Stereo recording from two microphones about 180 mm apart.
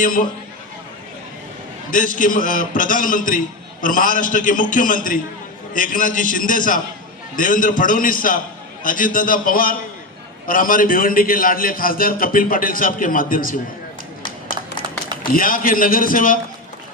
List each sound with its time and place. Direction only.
0.0 s a man's voice: 50° left (ahead or behind)
1.9 s a man's voice: 50° left (ahead or behind)
15.2 s a man's voice: 50° left (ahead or behind)